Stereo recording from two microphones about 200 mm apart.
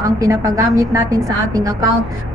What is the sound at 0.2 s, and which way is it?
A woman's voice, 15° right (ahead or behind).